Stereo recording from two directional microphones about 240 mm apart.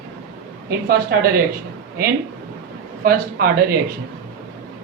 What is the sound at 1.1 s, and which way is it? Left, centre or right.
Speech, right.